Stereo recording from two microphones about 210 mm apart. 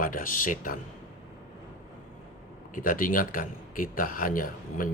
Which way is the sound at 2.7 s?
40° left (ahead or behind).